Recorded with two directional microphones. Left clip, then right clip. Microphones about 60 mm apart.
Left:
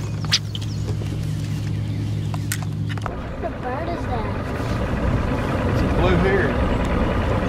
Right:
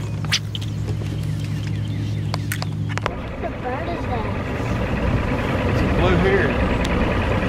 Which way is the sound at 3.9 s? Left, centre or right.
Right.